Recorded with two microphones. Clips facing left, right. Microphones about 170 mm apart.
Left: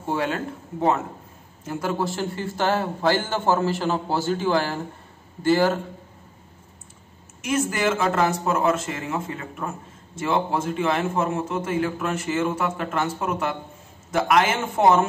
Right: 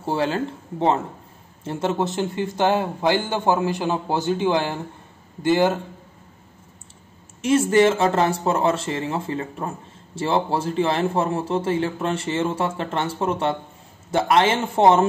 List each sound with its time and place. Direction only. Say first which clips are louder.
0.0 s a man's voice: right 3 dB; 30° right (ahead or behind)
7.4 s a man's voice: right 7 dB; 30° right (ahead or behind)